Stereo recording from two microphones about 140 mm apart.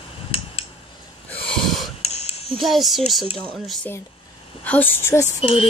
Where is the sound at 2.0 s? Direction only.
45° left (ahead or behind).